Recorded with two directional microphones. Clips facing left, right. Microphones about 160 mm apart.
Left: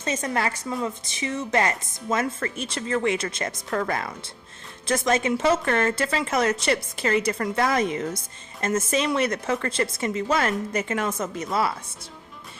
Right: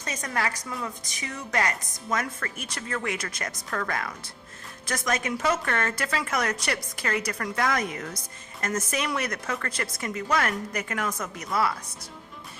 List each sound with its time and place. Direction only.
0.0 s a woman's voice: 25° left (ahead or behind)